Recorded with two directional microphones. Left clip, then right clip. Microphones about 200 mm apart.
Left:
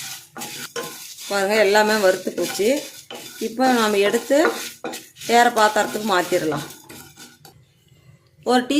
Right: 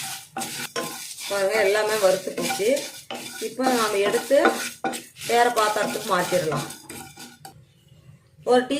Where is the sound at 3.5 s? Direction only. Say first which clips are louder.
Left 4 dB; 50° left (ahead or behind).